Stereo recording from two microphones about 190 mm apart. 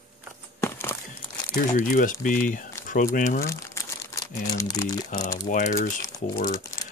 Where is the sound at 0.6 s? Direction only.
15° left (ahead or behind).